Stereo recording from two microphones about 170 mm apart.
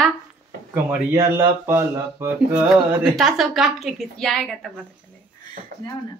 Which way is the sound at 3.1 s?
5° right (ahead or behind).